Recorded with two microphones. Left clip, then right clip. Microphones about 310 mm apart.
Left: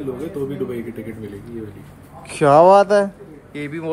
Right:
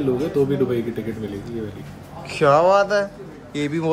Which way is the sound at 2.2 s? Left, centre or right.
Centre.